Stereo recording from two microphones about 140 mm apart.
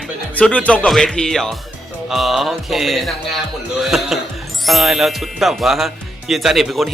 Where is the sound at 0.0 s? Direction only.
5° left (ahead or behind).